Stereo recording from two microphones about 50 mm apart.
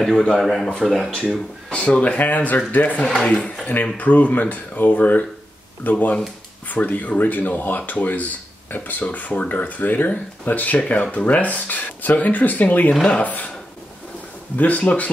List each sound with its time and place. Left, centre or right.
0.4 s speech: centre
1.1 s speech: centre
1.7 s speech: left
14.6 s speech: left